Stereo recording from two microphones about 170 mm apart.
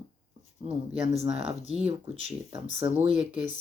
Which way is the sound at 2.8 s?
30° right (ahead or behind).